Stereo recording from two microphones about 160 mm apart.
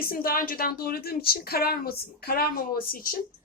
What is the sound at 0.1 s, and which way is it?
A woman's voice, 65° left (ahead or behind).